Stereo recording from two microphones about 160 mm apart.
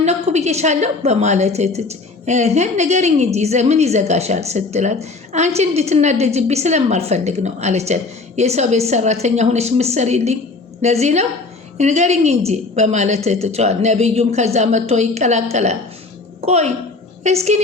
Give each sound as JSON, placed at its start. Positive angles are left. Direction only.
{"t": 0.0, "sound": "a woman's voice", "side_deg": -45}